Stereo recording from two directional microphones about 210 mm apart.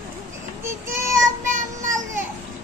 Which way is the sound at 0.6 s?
10° right (ahead or behind).